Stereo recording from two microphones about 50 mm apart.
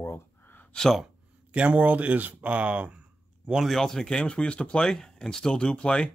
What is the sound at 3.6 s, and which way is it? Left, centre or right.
Speech, centre.